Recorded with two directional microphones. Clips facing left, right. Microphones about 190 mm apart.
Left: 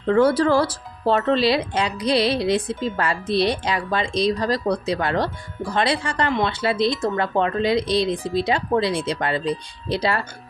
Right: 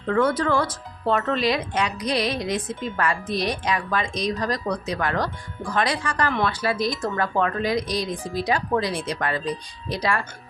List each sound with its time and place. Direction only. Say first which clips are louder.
0.1 s speech: left 4 dB; 35° left (ahead or behind)